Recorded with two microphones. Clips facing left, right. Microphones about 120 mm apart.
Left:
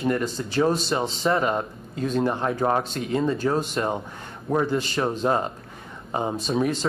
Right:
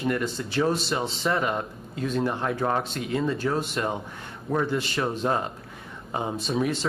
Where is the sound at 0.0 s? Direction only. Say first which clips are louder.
Left 2 dB; 40° left (ahead or behind).